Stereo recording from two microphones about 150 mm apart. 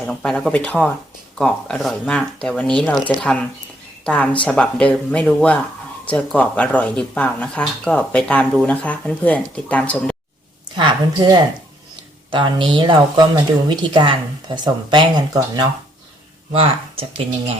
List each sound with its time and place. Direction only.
0.0 s speech: 5° left (ahead or behind)
10.8 s a woman's voice: 30° right (ahead or behind)
16.5 s speech: 40° right (ahead or behind)